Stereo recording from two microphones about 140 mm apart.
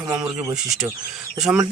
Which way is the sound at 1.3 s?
5° right (ahead or behind).